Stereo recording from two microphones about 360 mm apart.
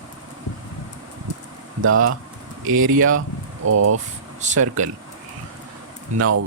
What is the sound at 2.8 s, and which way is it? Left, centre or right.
Speech, right.